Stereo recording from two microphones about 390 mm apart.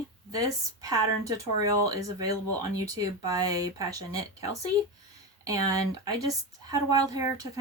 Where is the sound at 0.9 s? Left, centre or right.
Right.